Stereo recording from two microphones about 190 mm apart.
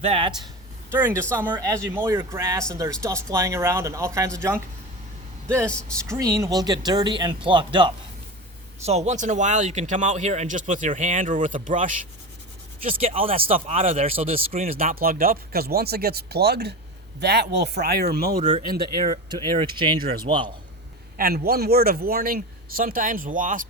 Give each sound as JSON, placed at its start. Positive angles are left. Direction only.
{"t": 0.0, "sound": "speech", "side_deg": -30}
{"t": 0.9, "sound": "speech", "side_deg": -10}
{"t": 6.1, "sound": "speech", "side_deg": -15}
{"t": 12.9, "sound": "speech", "side_deg": -30}
{"t": 14.7, "sound": "speech", "side_deg": -50}
{"t": 19.3, "sound": "speech", "side_deg": -25}
{"t": 21.2, "sound": "speech", "side_deg": -50}